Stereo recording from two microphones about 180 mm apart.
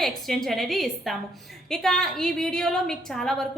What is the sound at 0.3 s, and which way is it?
A woman's voice, centre (ahead or behind).